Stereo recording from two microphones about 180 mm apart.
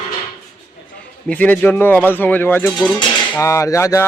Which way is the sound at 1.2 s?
10° left (ahead or behind).